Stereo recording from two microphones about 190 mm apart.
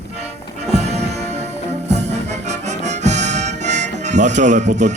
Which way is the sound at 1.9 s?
65° right (ahead or behind).